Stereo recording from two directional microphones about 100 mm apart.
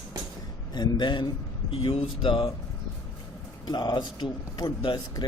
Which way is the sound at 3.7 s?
45° left (ahead or behind).